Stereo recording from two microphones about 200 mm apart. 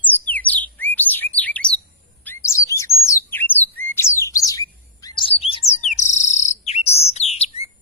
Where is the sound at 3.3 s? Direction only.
10° left (ahead or behind); by 7.4 s 30° left (ahead or behind).